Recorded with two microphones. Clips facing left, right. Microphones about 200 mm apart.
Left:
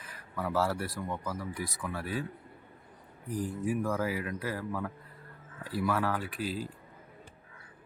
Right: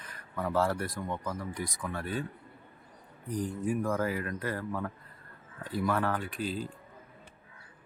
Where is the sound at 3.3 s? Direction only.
5° left (ahead or behind).